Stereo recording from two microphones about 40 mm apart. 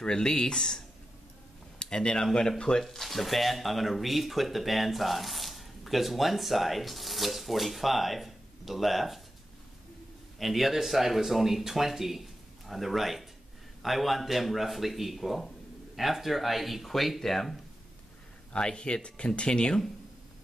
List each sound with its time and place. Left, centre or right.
0.0 s speech: centre
2.8 s speech: centre
10.4 s speech: centre
18.5 s speech: left